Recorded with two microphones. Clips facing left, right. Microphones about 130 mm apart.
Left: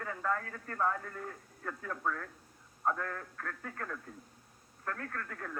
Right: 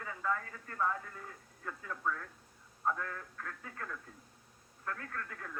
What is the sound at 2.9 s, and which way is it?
Speech, 40° left (ahead or behind).